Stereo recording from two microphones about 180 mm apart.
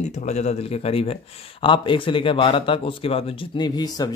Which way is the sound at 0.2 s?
40° left (ahead or behind).